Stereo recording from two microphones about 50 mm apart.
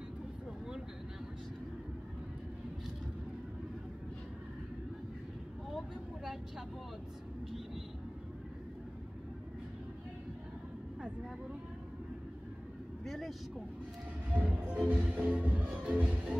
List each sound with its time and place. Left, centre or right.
13.0 s vehicle: centre
14.3 s music: right